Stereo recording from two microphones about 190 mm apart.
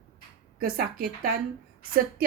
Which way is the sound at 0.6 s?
50° right (ahead or behind).